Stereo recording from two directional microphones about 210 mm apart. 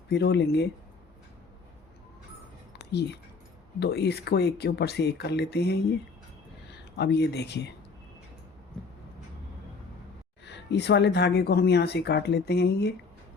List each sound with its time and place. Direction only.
0.1 s speech: 55° left (ahead or behind)
2.7 s a sound: 50° left (ahead or behind)
3.8 s speech: 50° left (ahead or behind)
10.4 s speech: 55° left (ahead or behind)